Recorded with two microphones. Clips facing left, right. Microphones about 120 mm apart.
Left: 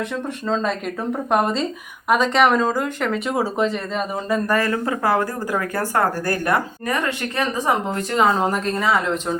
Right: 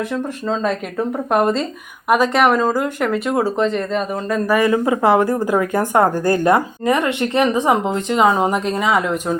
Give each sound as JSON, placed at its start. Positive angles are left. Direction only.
{"t": 0.4, "sound": "speech", "side_deg": -5}
{"t": 4.4, "sound": "speech", "side_deg": -15}